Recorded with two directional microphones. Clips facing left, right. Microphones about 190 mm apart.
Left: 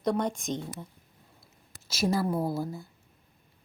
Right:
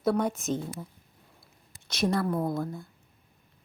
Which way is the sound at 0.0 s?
5° right (ahead or behind).